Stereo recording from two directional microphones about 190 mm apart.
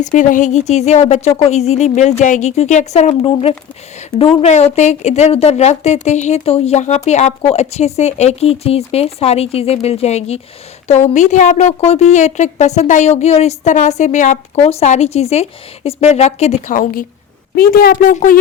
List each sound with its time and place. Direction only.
0.0 s a woman's voice: 40° left (ahead or behind)